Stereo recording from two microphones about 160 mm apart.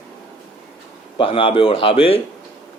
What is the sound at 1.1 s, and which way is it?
Speech, 35° left (ahead or behind).